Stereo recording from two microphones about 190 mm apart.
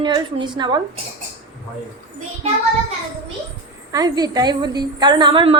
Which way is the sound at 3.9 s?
20° right (ahead or behind).